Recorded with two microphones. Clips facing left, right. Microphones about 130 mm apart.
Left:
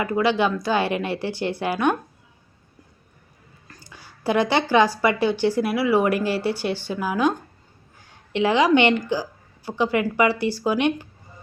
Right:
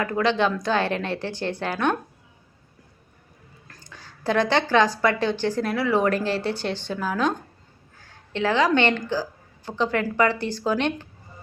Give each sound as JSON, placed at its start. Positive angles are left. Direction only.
{"t": 0.0, "sound": "a woman's voice", "side_deg": 5}
{"t": 3.7, "sound": "a sound", "side_deg": 10}
{"t": 4.7, "sound": "a woman's voice", "side_deg": 10}